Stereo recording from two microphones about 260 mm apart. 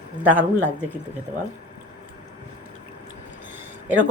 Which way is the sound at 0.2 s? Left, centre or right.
Centre.